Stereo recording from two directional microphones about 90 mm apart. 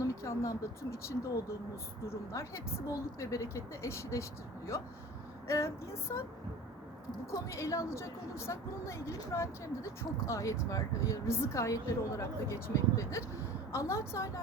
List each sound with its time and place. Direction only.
0.0 s a woman's voice: 35° left (ahead or behind)
7.3 s a woman's voice: 35° left (ahead or behind)